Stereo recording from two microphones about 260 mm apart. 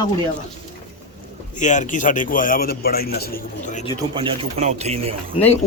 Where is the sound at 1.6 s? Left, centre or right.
Left.